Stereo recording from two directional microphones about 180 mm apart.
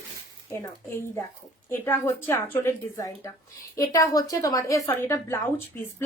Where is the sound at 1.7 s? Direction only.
10° left (ahead or behind).